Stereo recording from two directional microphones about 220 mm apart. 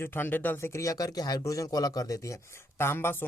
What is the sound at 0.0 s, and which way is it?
Speech, 10° left (ahead or behind).